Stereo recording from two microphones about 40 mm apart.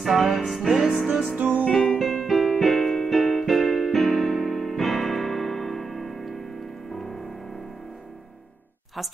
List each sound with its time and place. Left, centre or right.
0.0 s music: centre
1.3 s music: right
1.6 s music: centre
2.2 s keyboard: centre